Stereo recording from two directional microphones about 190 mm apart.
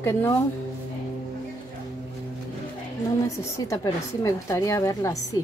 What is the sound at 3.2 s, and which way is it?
A woman's voice, 15° left (ahead or behind).